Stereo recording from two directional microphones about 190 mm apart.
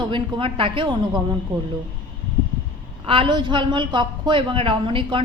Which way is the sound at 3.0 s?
25° right (ahead or behind).